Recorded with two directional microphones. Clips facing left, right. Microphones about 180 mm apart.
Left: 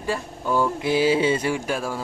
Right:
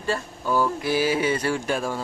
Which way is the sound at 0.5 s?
20° left (ahead or behind).